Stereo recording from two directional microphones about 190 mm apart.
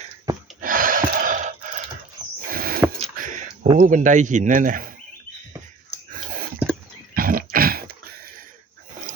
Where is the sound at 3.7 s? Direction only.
45° right (ahead or behind).